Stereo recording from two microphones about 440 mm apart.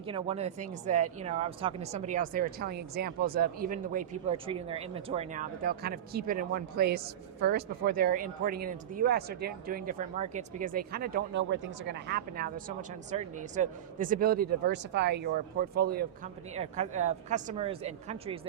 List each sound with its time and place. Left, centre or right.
0.0 s a woman's voice: centre